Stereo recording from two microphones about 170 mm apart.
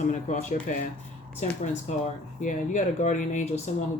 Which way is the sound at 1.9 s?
45° left (ahead or behind).